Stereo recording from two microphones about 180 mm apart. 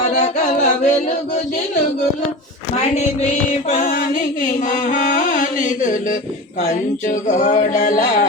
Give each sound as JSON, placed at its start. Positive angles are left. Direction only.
{"t": 0.1, "sound": "music", "side_deg": 40}
{"t": 3.7, "sound": "chant", "side_deg": 45}